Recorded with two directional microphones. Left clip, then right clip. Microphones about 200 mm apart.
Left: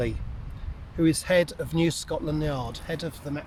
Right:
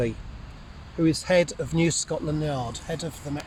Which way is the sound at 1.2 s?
20° right (ahead or behind).